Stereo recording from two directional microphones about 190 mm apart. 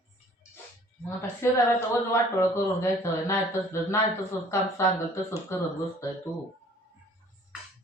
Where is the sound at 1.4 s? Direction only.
15° left (ahead or behind).